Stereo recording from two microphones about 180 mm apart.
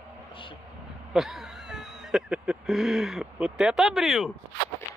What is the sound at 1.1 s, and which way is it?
Speech, centre (ahead or behind).